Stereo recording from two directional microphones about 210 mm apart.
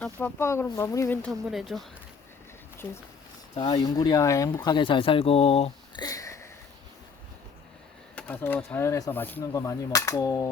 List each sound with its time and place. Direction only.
0.0 s speech: 10° left (ahead or behind)
3.5 s speech: 20° left (ahead or behind)
6.1 s a sound: 15° left (ahead or behind)
8.1 s speech: 10° left (ahead or behind)